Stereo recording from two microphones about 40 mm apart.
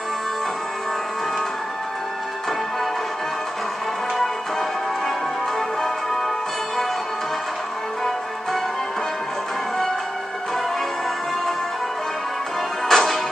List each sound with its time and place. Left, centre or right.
4.2 s music: centre
12.8 s music: centre